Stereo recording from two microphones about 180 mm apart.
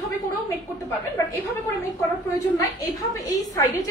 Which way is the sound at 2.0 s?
20° left (ahead or behind).